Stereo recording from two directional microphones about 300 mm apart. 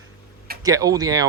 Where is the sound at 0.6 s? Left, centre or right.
Centre.